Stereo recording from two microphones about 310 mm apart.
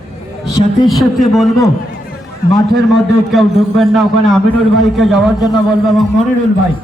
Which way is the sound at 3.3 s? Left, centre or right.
Centre.